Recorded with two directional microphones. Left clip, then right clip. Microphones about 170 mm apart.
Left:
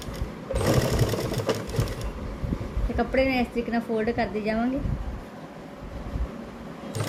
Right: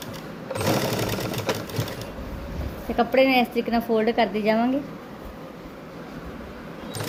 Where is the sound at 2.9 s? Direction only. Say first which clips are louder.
Right 5 dB; 45° right (ahead or behind).